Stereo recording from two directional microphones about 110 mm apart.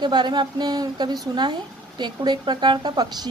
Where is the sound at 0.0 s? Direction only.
40° right (ahead or behind).